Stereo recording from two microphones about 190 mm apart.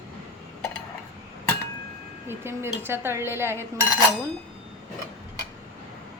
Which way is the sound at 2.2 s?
10° right (ahead or behind).